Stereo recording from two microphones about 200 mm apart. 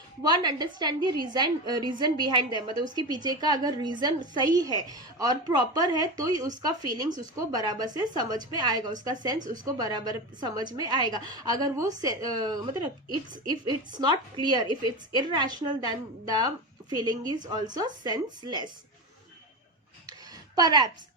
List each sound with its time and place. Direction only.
0.2 s a woman's voice: 20° right (ahead or behind)
20.6 s a woman's voice: 20° right (ahead or behind)